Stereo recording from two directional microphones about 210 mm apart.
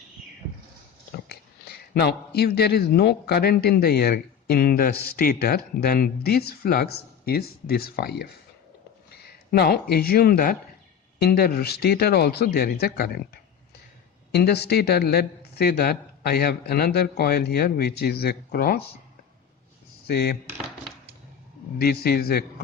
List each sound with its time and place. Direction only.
1.1 s speech: 50° left (ahead or behind)
20.1 s speech: 50° left (ahead or behind)
21.8 s speech: 45° left (ahead or behind)